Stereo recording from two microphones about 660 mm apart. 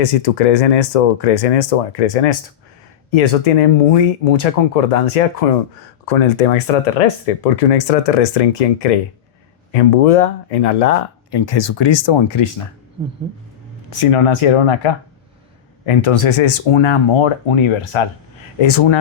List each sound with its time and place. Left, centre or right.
0.0 s speech: left
11.3 s speech: left
14.0 s speech: left